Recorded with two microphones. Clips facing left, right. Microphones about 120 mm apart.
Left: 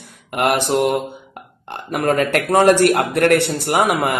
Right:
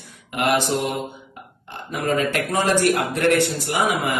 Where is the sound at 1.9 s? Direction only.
60° left (ahead or behind).